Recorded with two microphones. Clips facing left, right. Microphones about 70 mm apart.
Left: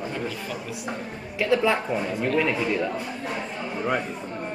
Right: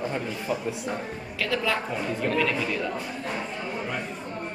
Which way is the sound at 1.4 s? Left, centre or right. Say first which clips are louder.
Left 5 dB; left.